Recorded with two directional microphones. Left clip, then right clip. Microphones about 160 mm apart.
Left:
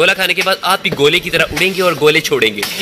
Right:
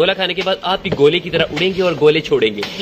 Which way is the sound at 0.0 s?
10° left (ahead or behind).